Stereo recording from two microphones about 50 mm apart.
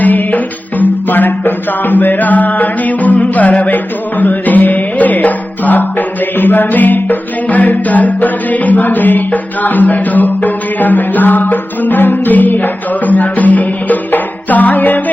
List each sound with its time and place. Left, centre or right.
0.0 s music: left